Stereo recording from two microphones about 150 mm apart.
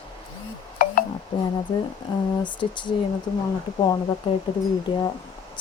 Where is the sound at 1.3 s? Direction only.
30° left (ahead or behind).